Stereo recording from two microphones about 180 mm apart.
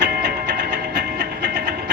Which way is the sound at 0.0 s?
65° right (ahead or behind).